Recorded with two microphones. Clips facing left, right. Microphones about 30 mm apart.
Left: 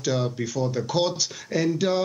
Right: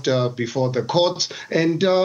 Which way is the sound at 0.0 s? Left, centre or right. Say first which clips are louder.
Right 5 dB; right.